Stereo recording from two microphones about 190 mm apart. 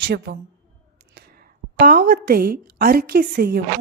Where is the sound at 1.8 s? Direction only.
50° right (ahead or behind).